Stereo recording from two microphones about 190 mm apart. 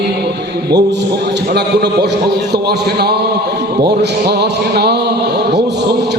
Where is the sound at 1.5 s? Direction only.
60° right (ahead or behind).